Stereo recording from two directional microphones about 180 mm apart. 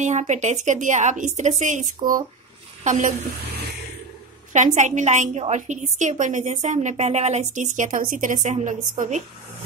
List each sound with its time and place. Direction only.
0.0 s a woman's voice: 40° right (ahead or behind)
4.5 s a woman's voice: 40° right (ahead or behind)